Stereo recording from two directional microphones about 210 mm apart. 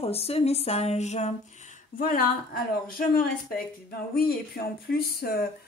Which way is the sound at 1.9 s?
45° left (ahead or behind).